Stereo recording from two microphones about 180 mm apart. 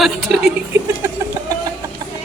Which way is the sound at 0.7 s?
15° right (ahead or behind).